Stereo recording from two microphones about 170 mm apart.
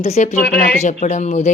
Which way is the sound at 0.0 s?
40° left (ahead or behind).